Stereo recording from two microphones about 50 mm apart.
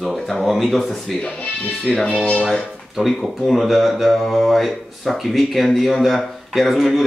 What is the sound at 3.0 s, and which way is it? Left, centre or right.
Speech, centre.